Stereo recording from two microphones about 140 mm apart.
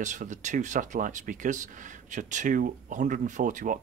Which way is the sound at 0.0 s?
60° right (ahead or behind).